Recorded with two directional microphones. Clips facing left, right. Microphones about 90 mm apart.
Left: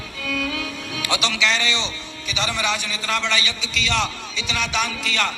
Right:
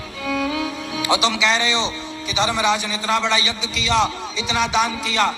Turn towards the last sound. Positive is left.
turn(degrees=-30)  # may be behind; listen again after turning